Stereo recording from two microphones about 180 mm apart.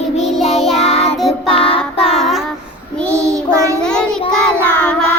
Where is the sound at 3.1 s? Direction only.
15° right (ahead or behind).